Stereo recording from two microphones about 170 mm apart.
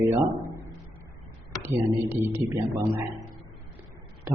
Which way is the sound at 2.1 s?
15° right (ahead or behind).